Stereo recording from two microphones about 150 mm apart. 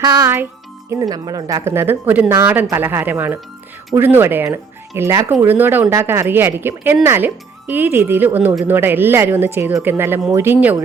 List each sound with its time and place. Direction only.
0.0 s speech: 25° right (ahead or behind)